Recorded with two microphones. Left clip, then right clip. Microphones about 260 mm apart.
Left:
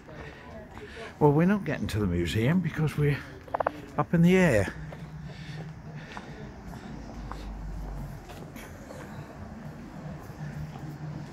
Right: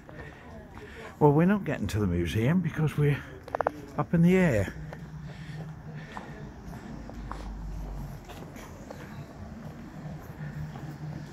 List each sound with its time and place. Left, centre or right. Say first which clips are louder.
1.2 s speech: even; centre
3.9 s speech: left 3 dB; centre